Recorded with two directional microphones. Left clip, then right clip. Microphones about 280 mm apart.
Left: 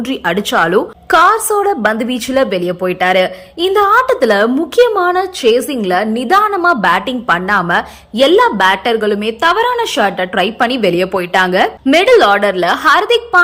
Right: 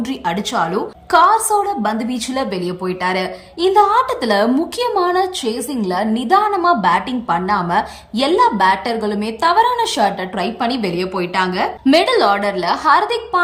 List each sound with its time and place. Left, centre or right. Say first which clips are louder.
0.1 s a woman's voice: left 7 dB; centre